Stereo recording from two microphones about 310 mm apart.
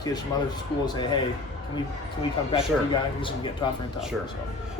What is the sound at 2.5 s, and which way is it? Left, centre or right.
A man's voice, centre.